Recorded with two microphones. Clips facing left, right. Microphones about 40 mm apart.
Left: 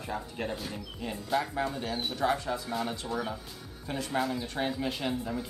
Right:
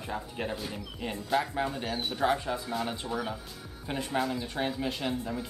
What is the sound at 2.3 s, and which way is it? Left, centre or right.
Speech, centre.